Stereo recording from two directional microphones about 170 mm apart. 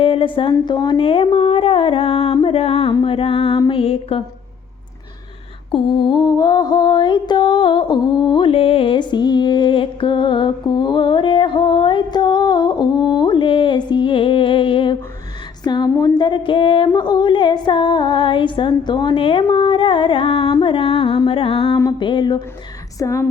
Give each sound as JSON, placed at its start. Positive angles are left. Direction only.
{"t": 0.0, "sound": "speech", "side_deg": 30}
{"t": 5.7, "sound": "music", "side_deg": 30}
{"t": 15.6, "sound": "a sound", "side_deg": 25}
{"t": 21.8, "sound": "music", "side_deg": 25}
{"t": 23.0, "sound": "speech", "side_deg": 15}